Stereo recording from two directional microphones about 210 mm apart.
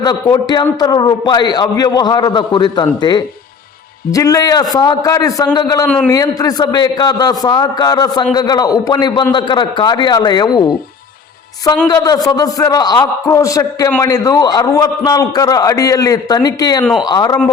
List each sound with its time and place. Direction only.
0.0 s a man's voice: 20° left (ahead or behind)
11.9 s a man's voice: 15° left (ahead or behind)